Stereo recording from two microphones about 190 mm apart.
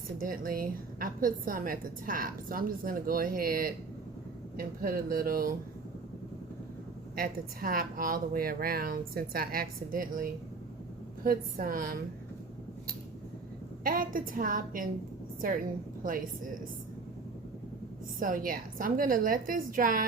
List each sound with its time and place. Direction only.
0.2 s a woman's voice: 50° right (ahead or behind)
7.2 s a woman's voice: 50° right (ahead or behind)
13.8 s a woman's voice: 45° right (ahead or behind)
18.2 s a woman's voice: 45° right (ahead or behind)